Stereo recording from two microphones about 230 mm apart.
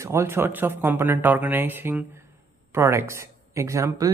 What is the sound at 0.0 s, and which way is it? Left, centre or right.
Speech, centre.